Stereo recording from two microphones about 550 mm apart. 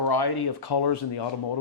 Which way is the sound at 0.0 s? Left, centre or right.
Left.